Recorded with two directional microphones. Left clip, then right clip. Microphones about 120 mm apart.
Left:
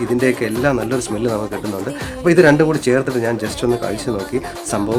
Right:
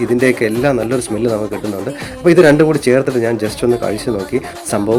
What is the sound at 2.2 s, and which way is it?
Speech, 25° right (ahead or behind).